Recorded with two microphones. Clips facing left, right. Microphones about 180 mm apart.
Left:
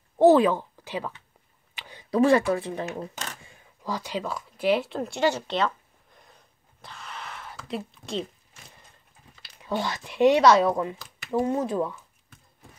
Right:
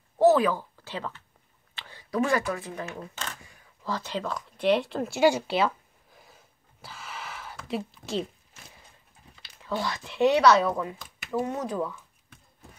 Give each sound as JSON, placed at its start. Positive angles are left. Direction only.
{"t": 0.2, "sound": "speech", "side_deg": 25}
{"t": 0.8, "sound": "speech", "side_deg": 15}
{"t": 3.8, "sound": "a sound", "side_deg": 10}
{"t": 9.6, "sound": "speech", "side_deg": 20}